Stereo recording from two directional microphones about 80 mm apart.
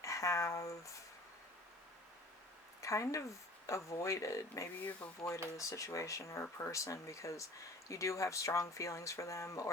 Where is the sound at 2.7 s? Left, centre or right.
Left.